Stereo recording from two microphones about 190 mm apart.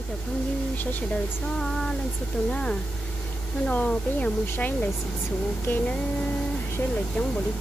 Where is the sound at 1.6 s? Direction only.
5° left (ahead or behind).